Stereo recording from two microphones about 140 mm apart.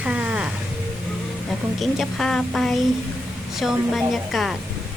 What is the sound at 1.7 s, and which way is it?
A woman's voice, centre (ahead or behind).